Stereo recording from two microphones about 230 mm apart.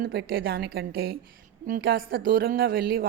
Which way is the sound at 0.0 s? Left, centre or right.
Right.